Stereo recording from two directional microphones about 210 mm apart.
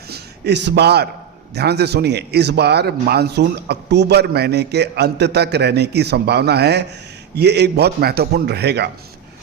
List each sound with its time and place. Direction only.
0.1 s speech: 55° right (ahead or behind)